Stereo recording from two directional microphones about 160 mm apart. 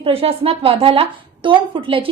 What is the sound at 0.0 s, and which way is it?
A woman's voice, 35° right (ahead or behind).